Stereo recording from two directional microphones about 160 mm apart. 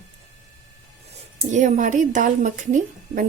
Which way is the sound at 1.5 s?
50° right (ahead or behind).